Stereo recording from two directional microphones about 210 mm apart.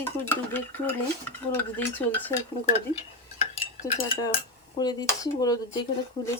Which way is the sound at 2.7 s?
30° left (ahead or behind).